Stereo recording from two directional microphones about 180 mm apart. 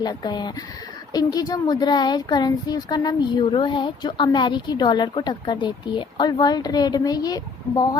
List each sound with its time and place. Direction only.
0.0 s speech: 25° left (ahead or behind)